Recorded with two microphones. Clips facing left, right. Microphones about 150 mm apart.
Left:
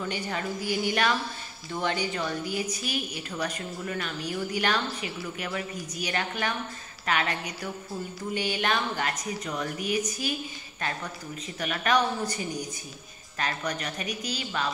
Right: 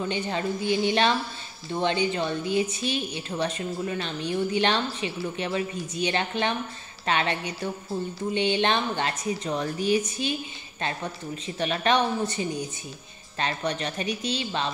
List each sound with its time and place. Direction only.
0.0 s a woman's voice: 25° right (ahead or behind)